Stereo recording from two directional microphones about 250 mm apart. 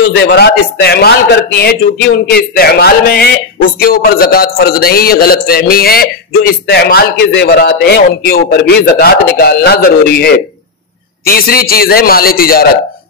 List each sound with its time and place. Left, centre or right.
0.3 s speech: left